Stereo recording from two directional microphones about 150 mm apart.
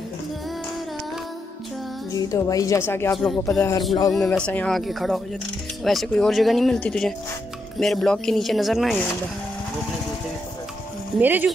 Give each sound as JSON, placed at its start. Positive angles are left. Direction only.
{"t": 2.1, "sound": "speech", "side_deg": 25}
{"t": 3.2, "sound": "speech", "side_deg": 5}
{"t": 11.1, "sound": "speech", "side_deg": -10}